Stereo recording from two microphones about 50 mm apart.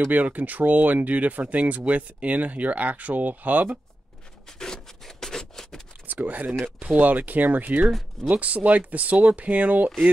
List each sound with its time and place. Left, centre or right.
0.1 s speech: right
4.5 s rub: centre
6.2 s speech: right